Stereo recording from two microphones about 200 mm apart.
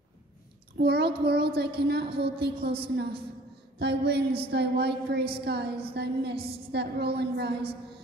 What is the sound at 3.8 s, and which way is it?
A woman's voice, 55° right (ahead or behind).